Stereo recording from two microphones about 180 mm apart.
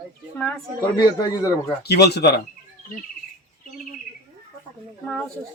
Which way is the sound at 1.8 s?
65° left (ahead or behind).